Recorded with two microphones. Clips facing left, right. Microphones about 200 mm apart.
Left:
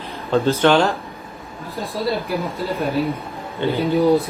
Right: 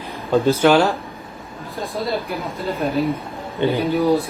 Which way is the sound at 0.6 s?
5° right (ahead or behind).